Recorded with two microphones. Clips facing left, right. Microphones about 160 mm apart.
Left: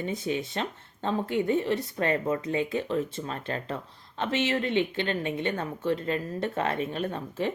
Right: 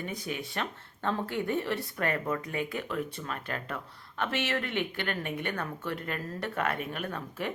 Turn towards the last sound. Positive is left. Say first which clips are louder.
# left 5 dB
turn(degrees=25)  # may be behind; listen again after turning